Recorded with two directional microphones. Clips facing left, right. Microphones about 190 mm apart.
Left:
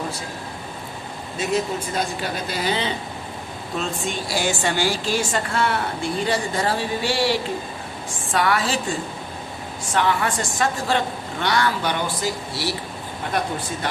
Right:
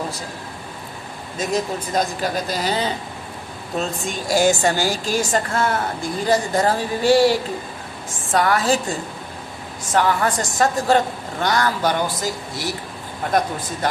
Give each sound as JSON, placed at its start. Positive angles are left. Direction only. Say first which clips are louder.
{"t": 1.4, "sound": "a woman's voice", "louder": "even", "side_deg": -40}
{"t": 9.9, "sound": "a woman's voice", "louder": "right 3 dB", "side_deg": -40}